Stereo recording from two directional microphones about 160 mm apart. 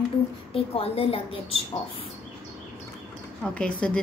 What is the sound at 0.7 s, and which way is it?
Speech, 35° left (ahead or behind).